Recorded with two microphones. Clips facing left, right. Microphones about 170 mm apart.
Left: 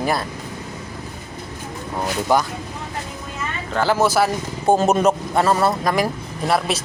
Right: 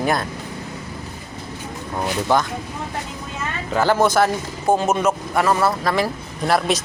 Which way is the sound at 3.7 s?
Centre (ahead or behind).